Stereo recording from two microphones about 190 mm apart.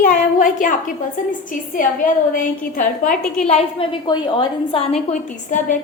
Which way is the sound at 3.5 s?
30° left (ahead or behind).